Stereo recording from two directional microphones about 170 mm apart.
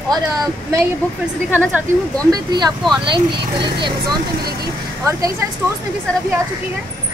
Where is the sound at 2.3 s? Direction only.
25° right (ahead or behind).